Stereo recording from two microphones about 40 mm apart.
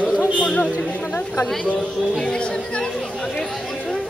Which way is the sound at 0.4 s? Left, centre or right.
Left.